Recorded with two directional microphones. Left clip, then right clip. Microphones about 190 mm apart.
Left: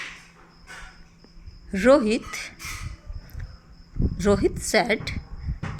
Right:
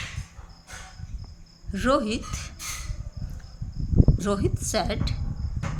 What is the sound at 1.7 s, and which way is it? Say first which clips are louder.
Speech: left 6 dB; 25° left (ahead or behind).